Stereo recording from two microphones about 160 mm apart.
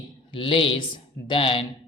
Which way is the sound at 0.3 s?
30° left (ahead or behind).